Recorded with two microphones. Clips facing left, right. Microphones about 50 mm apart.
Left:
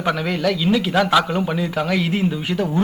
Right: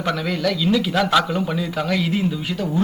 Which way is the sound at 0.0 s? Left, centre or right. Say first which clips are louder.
Left 2 dB; centre.